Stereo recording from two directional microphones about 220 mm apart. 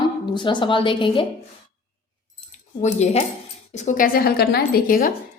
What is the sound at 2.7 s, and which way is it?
A woman's voice, 30° left (ahead or behind).